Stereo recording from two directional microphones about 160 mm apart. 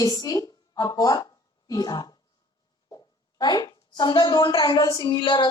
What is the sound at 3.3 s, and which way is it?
A woman's voice, 25° left (ahead or behind).